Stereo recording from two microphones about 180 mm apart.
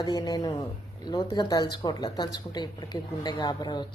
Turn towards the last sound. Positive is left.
turn(degrees=25)  # may be behind; listen again after turning